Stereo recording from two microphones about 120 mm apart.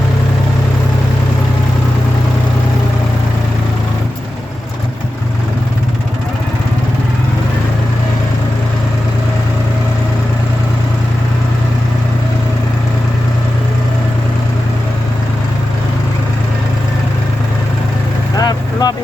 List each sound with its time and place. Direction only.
18.3 s vehicle: 30° left (ahead or behind)